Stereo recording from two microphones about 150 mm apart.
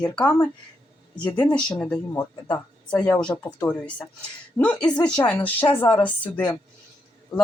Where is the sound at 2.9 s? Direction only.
5° left (ahead or behind).